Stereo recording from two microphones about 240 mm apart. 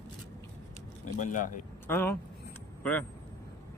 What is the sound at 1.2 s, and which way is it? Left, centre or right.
Speech, left.